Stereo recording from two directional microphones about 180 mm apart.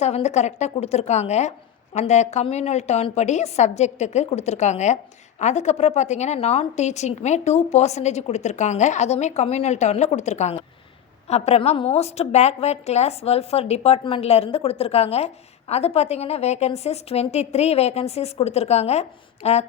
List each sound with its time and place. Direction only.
0.0 s a woman's voice: 40° left (ahead or behind)